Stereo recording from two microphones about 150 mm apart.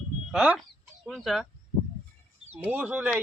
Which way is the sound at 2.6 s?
10° right (ahead or behind).